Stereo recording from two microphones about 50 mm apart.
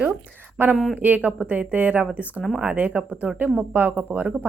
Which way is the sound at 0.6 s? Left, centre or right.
Right.